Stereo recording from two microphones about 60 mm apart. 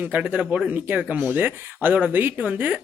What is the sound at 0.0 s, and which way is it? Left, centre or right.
Speech, right.